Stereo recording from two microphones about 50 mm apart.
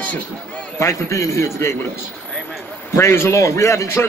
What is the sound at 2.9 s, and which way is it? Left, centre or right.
A man's voice, left.